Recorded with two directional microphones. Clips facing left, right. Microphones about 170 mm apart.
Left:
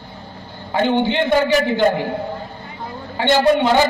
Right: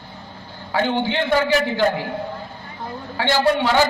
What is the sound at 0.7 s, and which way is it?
A man's voice, 15° left (ahead or behind).